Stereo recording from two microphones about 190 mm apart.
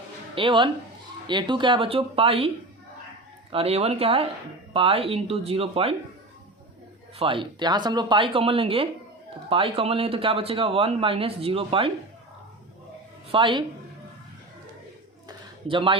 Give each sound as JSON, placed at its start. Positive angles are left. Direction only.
{"t": 0.3, "sound": "speech", "side_deg": -25}
{"t": 3.5, "sound": "speech", "side_deg": -30}
{"t": 7.2, "sound": "speech", "side_deg": -25}
{"t": 13.3, "sound": "speech", "side_deg": -25}
{"t": 15.3, "sound": "a sound", "side_deg": -25}